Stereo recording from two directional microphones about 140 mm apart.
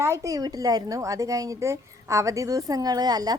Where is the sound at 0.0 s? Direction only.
20° right (ahead or behind).